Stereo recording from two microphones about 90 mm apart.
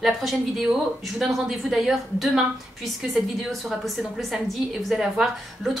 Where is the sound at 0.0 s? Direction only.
5° right (ahead or behind).